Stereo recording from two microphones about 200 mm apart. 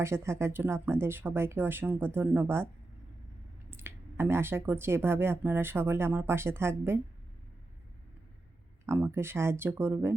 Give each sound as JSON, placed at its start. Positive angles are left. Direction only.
{"t": 0.0, "sound": "speech", "side_deg": -15}
{"t": 3.7, "sound": "speech", "side_deg": -10}
{"t": 8.9, "sound": "speech", "side_deg": -10}